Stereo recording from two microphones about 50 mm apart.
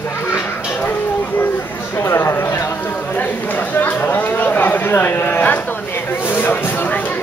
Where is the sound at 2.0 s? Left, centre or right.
Left.